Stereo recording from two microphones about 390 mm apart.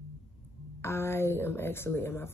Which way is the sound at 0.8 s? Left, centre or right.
Centre.